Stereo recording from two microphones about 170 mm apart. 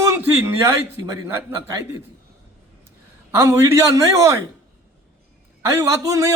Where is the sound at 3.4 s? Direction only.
15° right (ahead or behind).